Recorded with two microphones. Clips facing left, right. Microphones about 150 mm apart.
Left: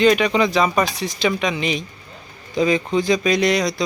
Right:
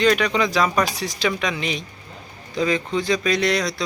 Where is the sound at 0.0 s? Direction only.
5° left (ahead or behind).